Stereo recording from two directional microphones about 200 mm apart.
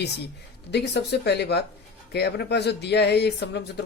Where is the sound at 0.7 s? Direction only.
55° left (ahead or behind).